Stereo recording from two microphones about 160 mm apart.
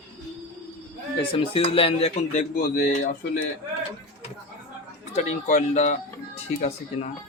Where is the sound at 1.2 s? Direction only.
35° left (ahead or behind); by 3.4 s 55° left (ahead or behind).